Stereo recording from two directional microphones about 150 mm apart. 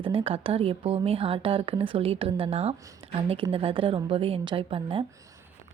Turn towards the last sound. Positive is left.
turn(degrees=-35)  # may be behind; listen again after turning